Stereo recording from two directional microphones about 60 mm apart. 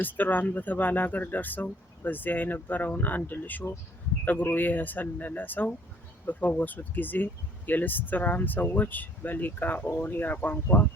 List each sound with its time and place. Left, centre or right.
0.0 s speech: left